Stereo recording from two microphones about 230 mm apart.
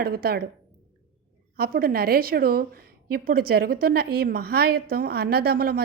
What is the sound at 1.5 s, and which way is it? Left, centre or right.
A woman's voice, right.